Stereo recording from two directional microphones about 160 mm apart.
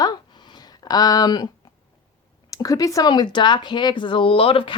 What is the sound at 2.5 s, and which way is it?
Speech, 20° left (ahead or behind).